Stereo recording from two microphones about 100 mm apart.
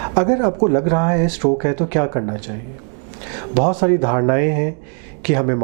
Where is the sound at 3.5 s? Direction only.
15° right (ahead or behind).